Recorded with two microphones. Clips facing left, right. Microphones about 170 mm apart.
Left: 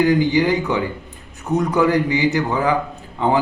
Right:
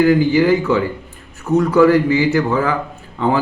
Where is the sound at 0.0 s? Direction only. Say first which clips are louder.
Right 3 dB; 20° left (ahead or behind).